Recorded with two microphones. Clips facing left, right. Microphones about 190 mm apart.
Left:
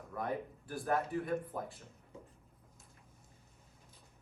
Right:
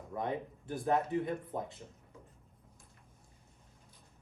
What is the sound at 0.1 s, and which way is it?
Speech, 20° right (ahead or behind).